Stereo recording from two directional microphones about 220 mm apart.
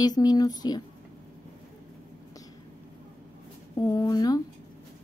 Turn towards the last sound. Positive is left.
turn(degrees=15)  # may be behind; listen again after turning